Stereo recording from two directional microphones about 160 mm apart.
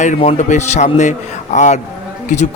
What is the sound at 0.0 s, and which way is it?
A man's voice, 45° left (ahead or behind).